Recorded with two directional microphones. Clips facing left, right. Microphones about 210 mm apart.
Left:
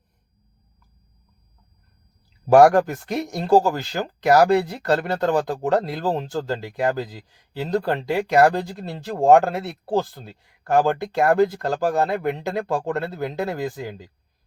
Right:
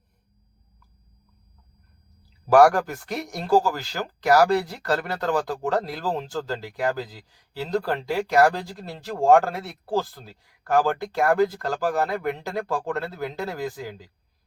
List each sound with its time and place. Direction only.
2.5 s speech: 25° left (ahead or behind)